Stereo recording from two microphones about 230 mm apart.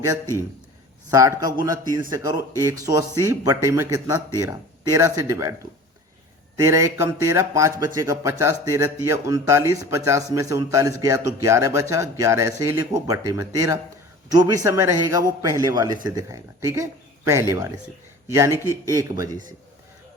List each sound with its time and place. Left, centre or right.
0.0 s speech: centre
1.6 s speech: centre
6.6 s speech: centre